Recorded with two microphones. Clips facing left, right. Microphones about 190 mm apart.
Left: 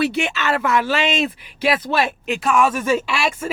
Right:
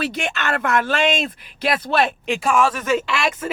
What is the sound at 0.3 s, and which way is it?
Speech, 50° right (ahead or behind).